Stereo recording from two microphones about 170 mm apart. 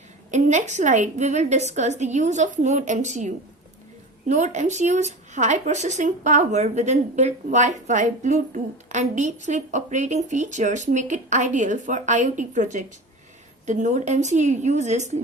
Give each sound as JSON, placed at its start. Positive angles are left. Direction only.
{"t": 0.3, "sound": "speech", "side_deg": -45}